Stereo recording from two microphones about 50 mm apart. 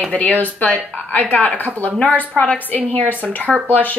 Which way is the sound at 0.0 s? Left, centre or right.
Left.